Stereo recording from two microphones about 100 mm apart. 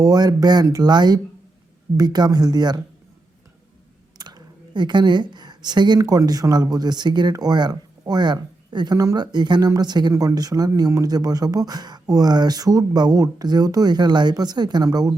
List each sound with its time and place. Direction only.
0.0 s speech: 40° right (ahead or behind)
4.2 s a sound: 45° right (ahead or behind)
6.0 s speech: 40° right (ahead or behind)